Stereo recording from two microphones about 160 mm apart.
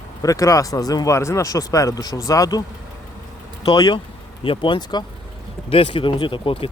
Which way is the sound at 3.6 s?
25° left (ahead or behind).